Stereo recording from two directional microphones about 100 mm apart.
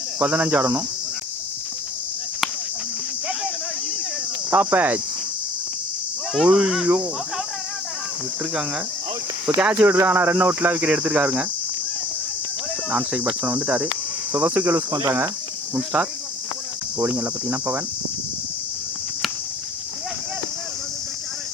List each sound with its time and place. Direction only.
0.2 s cricket: 15° right (ahead or behind)
4.5 s cricket: 20° right (ahead or behind)
6.3 s speech: 5° right (ahead or behind)
6.8 s cricket: 15° right (ahead or behind)
9.5 s cricket: 10° right (ahead or behind)
9.8 s speech: 20° right (ahead or behind)
12.9 s cricket: 15° right (ahead or behind)